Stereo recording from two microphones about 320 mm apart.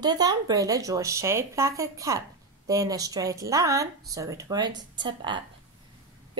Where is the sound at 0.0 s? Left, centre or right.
Centre.